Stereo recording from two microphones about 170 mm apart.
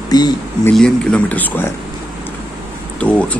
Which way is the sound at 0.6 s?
5° left (ahead or behind).